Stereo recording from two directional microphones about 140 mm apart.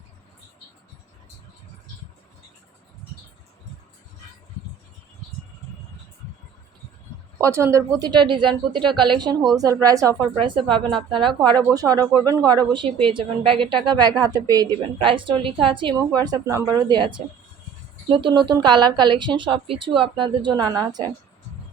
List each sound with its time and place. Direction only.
7.4 s a woman's voice: 20° right (ahead or behind)
10.4 s a woman's voice: 35° right (ahead or behind)
13.1 s a woman's voice: 40° right (ahead or behind)
15.0 s a woman's voice: 35° right (ahead or behind)